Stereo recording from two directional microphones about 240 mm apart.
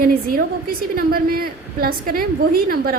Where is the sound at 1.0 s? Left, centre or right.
Right.